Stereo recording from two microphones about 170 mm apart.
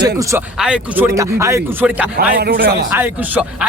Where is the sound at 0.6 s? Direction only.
10° right (ahead or behind).